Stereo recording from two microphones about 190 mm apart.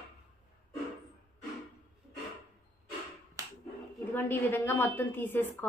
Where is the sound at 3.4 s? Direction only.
15° right (ahead or behind).